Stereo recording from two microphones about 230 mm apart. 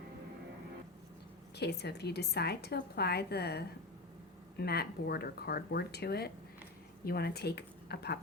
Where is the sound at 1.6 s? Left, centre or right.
Left.